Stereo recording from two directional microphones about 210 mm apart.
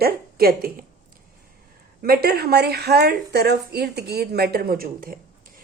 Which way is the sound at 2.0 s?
45° right (ahead or behind).